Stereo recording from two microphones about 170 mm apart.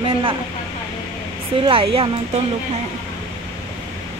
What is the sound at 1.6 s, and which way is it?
Speech, 30° right (ahead or behind).